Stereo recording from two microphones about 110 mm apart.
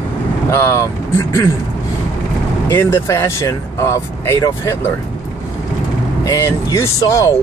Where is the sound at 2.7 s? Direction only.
20° left (ahead or behind).